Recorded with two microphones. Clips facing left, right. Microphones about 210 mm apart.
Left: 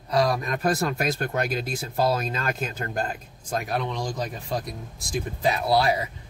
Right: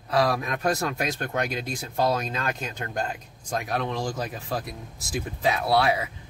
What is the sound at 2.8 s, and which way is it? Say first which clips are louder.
Speech: right 1 dB; 40° left (ahead or behind).